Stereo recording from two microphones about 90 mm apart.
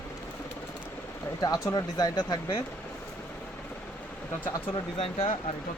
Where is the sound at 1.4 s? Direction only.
40° left (ahead or behind).